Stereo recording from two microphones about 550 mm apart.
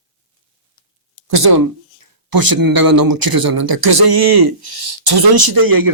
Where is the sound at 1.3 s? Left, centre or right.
Right.